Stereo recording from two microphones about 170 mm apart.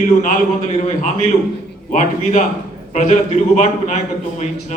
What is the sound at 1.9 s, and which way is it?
A man's voice, 45° left (ahead or behind).